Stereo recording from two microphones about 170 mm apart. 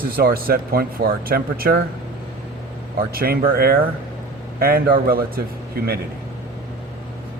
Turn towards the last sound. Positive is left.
turn(degrees=-65)  # may be behind; listen again after turning